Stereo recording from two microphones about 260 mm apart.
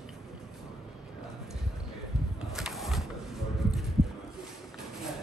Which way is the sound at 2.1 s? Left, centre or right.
Centre.